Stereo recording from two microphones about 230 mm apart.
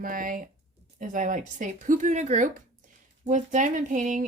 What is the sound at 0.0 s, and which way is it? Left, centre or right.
Speech, right.